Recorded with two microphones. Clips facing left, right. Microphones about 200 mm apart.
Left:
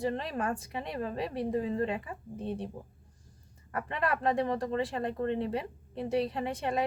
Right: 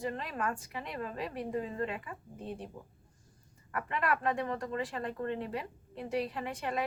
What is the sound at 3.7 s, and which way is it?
Speech, 30° left (ahead or behind).